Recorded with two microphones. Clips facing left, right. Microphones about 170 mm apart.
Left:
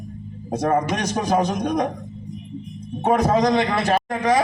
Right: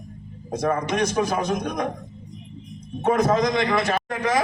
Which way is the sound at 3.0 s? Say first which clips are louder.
Left 2 dB; 35° left (ahead or behind).